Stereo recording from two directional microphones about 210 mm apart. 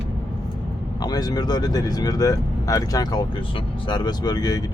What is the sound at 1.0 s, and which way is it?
Speech, 20° left (ahead or behind).